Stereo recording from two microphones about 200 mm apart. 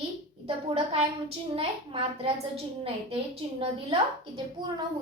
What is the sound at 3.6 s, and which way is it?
A woman's voice, 25° right (ahead or behind).